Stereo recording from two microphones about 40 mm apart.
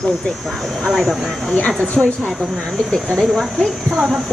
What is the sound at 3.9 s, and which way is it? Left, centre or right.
Speech, centre.